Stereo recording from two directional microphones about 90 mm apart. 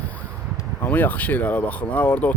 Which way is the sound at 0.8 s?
20° left (ahead or behind).